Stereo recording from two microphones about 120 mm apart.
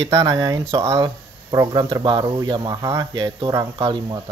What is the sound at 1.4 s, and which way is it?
Speech, 40° right (ahead or behind).